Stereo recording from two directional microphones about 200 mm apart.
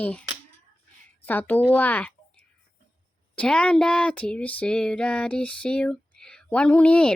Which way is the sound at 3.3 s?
5° left (ahead or behind).